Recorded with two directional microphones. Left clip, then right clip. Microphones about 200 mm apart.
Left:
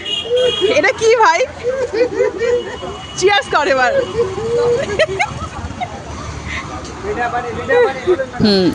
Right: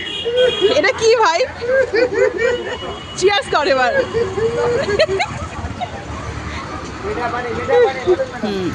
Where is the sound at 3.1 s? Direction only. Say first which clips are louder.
Left 2 dB; centre (ahead or behind).